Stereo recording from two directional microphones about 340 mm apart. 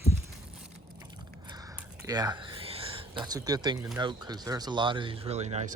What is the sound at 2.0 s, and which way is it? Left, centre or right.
Speech, centre.